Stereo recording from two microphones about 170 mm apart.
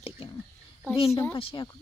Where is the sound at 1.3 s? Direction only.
30° left (ahead or behind).